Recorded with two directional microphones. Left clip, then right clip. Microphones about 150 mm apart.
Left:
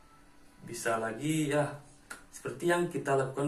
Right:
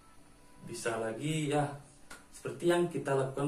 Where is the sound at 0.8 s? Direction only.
20° right (ahead or behind).